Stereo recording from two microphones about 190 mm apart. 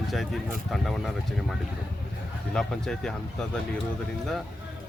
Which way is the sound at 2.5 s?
5° left (ahead or behind).